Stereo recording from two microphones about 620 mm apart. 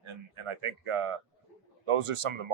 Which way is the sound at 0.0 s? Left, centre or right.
Right.